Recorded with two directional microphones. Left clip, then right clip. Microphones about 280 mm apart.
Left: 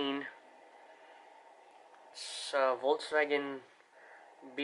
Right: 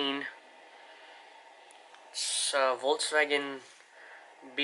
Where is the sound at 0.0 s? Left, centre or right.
Centre.